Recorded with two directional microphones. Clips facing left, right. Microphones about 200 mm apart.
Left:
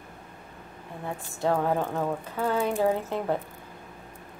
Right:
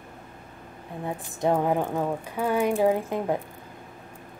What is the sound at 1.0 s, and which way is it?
Speech, 15° right (ahead or behind).